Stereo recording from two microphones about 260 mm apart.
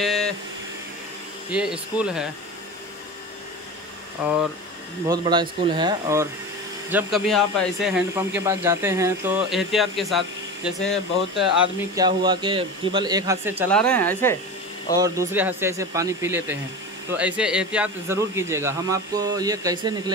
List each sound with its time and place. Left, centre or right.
0.0 s a sound: centre
1.5 s speech: centre
4.2 s speech: centre
5.0 s speech: centre
6.9 s speech: centre
11.9 s speech: centre
13.7 s speech: centre
15.0 s speech: centre